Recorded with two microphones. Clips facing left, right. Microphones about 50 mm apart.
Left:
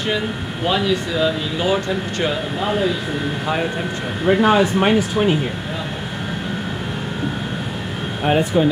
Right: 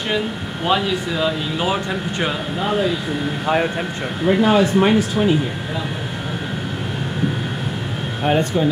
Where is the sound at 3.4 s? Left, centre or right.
Centre.